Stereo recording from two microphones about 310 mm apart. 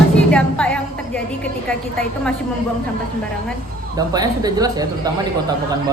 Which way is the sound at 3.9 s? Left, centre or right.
Centre.